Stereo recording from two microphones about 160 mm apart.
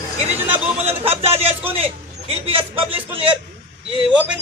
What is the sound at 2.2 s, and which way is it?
Speech, 35° right (ahead or behind).